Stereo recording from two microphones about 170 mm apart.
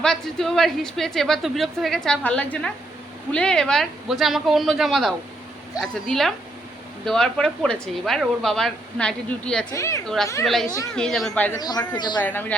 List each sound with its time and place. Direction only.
0.0 s a woman's voice: 5° left (ahead or behind)
9.7 s speech: 15° left (ahead or behind)
10.4 s a woman's voice: centre (ahead or behind)
11.5 s speech: 25° left (ahead or behind)
12.2 s speech: 10° left (ahead or behind)